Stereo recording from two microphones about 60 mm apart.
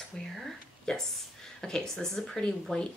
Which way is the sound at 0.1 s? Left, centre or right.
Centre.